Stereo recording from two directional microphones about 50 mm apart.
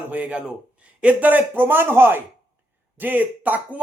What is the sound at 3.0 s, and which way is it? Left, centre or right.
Speech, right.